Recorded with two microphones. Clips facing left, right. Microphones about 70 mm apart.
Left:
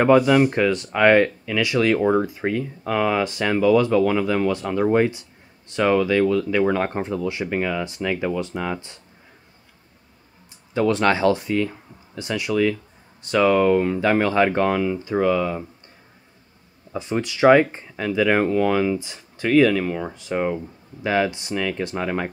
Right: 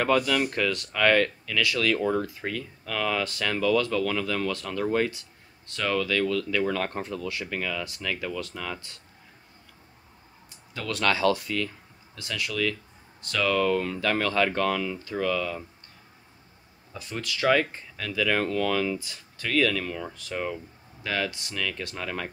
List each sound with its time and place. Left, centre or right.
0.0 s speech: left
10.7 s speech: left
16.9 s speech: left